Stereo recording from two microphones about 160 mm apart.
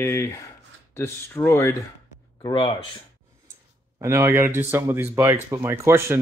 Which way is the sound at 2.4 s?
30° left (ahead or behind).